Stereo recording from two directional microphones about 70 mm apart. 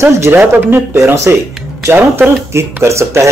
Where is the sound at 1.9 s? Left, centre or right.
Right.